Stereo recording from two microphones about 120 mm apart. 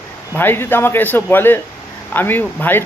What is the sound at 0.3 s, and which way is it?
Speech, 20° left (ahead or behind).